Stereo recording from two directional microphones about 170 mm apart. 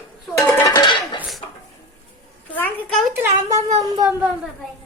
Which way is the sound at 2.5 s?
10° left (ahead or behind).